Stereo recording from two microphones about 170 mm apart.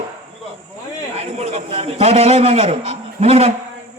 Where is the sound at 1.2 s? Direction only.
35° right (ahead or behind).